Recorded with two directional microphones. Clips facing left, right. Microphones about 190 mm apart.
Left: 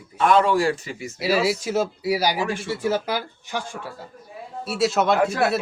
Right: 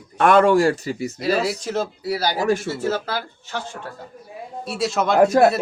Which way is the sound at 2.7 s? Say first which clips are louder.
Even; 15° left (ahead or behind).